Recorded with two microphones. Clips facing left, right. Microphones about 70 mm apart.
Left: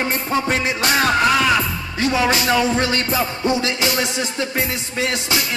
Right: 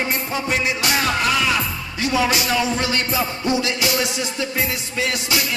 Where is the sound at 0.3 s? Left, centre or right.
Left.